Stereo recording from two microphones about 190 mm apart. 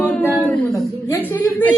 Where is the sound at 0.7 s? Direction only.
15° left (ahead or behind).